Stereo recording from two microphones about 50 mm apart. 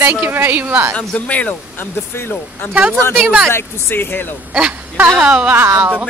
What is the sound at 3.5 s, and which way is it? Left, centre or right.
Speech, left.